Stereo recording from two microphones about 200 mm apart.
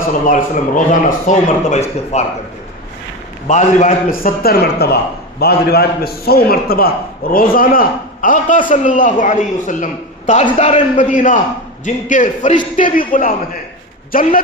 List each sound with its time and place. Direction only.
0.3 s speech: 40° left (ahead or behind)
3.4 s a man's voice: 35° left (ahead or behind)